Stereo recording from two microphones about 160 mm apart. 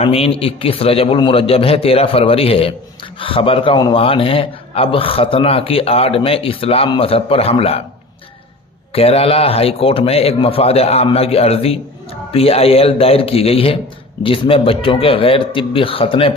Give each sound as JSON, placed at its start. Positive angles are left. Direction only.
{"t": 0.0, "sound": "a man's voice", "side_deg": 40}
{"t": 8.9, "sound": "a man's voice", "side_deg": 40}